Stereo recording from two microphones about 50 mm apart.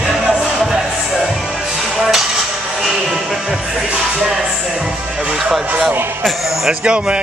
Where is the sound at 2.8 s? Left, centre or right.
Centre.